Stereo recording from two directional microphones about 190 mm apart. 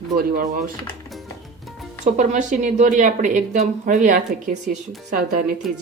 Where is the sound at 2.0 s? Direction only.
40° right (ahead or behind).